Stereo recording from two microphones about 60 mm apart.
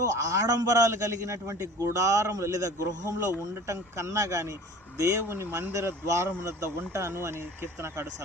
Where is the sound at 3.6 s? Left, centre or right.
Right.